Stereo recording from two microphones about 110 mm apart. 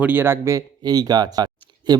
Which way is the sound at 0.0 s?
20° right (ahead or behind).